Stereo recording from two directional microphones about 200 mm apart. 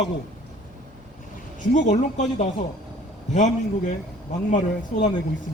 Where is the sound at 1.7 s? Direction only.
35° left (ahead or behind).